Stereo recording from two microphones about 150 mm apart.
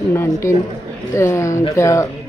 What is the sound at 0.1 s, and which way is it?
Speech, 15° left (ahead or behind).